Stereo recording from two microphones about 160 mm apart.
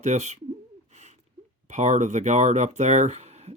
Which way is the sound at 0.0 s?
45° right (ahead or behind).